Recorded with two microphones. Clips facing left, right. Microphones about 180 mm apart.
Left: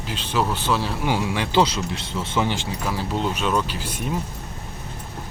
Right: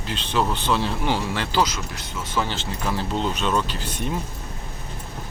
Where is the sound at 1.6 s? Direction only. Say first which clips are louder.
Left 3 dB; 30° left (ahead or behind).